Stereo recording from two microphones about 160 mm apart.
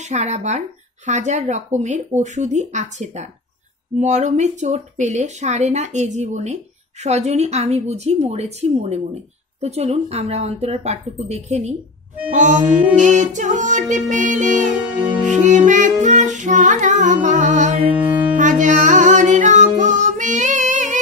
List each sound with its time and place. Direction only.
0.0 s speech: 45° right (ahead or behind)
18.3 s music: 50° right (ahead or behind)